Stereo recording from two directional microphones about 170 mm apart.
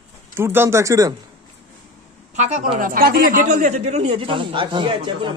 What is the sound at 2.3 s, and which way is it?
Speech, 40° right (ahead or behind).